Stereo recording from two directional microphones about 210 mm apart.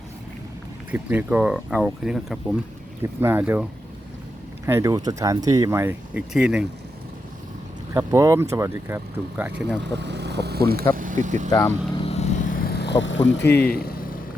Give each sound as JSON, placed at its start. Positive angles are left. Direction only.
{"t": 0.9, "sound": "speech", "side_deg": -10}
{"t": 7.9, "sound": "speech", "side_deg": -15}
{"t": 10.0, "sound": "speech", "side_deg": -55}
{"t": 10.9, "sound": "vehicle", "side_deg": -40}
{"t": 11.5, "sound": "vehicle", "side_deg": 20}
{"t": 13.2, "sound": "speech", "side_deg": 55}